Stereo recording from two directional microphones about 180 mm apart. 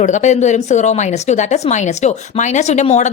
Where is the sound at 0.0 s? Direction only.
40° left (ahead or behind).